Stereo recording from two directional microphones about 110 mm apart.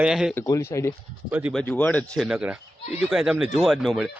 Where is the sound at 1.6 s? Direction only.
15° left (ahead or behind).